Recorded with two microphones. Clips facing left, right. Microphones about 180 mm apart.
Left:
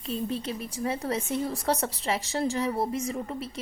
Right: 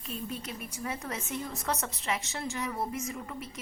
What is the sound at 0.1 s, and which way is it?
A woman's voice, 30° left (ahead or behind).